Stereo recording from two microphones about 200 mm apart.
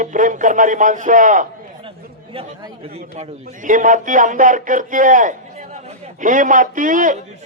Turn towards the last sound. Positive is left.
turn(degrees=-40)  # may be behind; listen again after turning